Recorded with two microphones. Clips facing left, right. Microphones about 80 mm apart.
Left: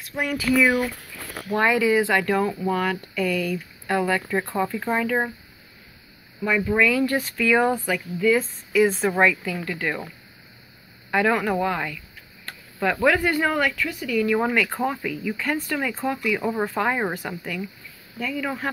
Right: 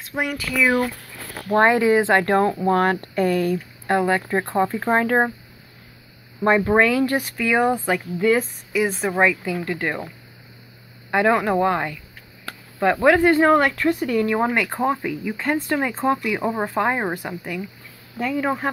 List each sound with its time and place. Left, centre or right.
0.0 s a sound: right
1.5 s speech: right
3.8 s speech: right
6.4 s speech: right
6.9 s speech: right
9.7 s speech: right
11.1 s speech: right
14.2 s speech: right
18.1 s speech: right